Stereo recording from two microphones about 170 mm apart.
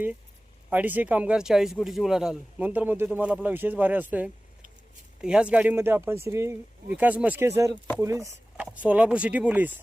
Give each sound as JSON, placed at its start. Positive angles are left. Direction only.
{"t": 0.7, "sound": "speech", "side_deg": -10}